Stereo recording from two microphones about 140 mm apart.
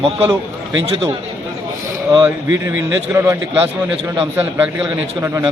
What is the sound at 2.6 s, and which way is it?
A man's voice, 20° right (ahead or behind).